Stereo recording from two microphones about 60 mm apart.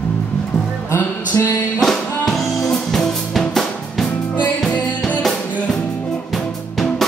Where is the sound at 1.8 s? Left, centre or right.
Centre.